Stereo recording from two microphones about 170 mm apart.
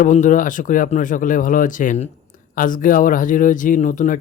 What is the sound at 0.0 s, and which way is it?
Speech, 50° left (ahead or behind).